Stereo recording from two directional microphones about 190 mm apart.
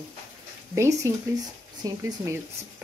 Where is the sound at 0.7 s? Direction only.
15° right (ahead or behind).